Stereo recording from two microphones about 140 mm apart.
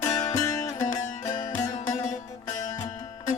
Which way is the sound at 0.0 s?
25° left (ahead or behind).